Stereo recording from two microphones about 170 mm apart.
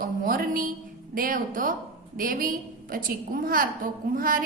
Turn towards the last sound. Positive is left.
turn(degrees=-55)  # may be behind; listen again after turning